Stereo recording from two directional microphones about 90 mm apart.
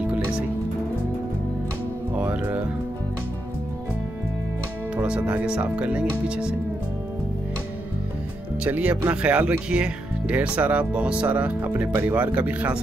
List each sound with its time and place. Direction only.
2.1 s music: 15° right (ahead or behind)
4.9 s speech: 15° right (ahead or behind)
8.6 s speech: 15° right (ahead or behind)